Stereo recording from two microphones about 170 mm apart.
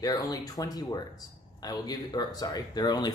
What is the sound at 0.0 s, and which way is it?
A man's voice, 20° left (ahead or behind).